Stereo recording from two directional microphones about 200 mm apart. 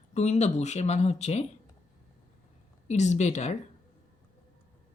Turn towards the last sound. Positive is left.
turn(degrees=35)  # may be behind; listen again after turning